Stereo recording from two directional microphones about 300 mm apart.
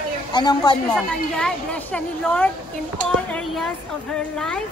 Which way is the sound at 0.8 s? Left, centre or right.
Centre.